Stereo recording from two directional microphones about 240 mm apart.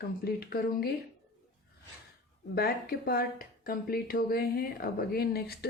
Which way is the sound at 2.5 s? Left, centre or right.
Left.